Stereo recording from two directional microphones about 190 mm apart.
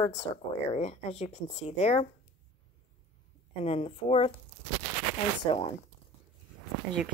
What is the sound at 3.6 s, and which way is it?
Speech, 30° left (ahead or behind).